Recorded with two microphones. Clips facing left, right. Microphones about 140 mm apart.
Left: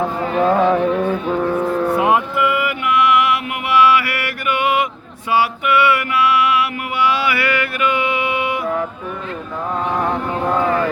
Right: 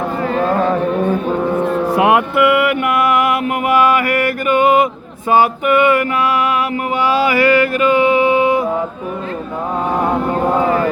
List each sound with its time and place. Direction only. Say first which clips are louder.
0.3 s music: left 2 dB; 5° left (ahead or behind)
1.6 s cattle: right 2 dB; 20° right (ahead or behind)
2.0 s mantra: right 7 dB; 70° right (ahead or behind); by 8.6 s 35° right (ahead or behind)